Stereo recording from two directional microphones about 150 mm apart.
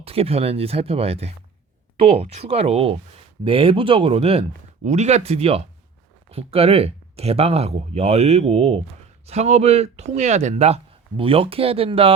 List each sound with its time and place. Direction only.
0.0 s speech: 40° right (ahead or behind)